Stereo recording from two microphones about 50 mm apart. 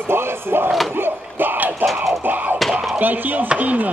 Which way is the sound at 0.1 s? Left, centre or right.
Right.